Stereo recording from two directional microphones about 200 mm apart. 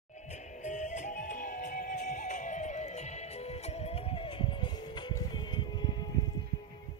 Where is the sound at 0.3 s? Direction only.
35° left (ahead or behind); by 6.0 s 20° left (ahead or behind).